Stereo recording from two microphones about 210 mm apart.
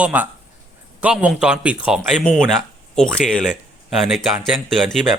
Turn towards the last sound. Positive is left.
turn(degrees=0)  # may be behind; listen again after turning